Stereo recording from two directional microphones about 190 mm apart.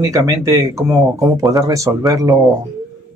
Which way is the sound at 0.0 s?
15° right (ahead or behind).